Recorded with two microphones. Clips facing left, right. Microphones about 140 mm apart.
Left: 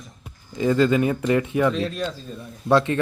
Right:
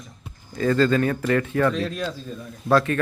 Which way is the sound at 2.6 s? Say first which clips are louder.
Left 1 dB; 25° left (ahead or behind).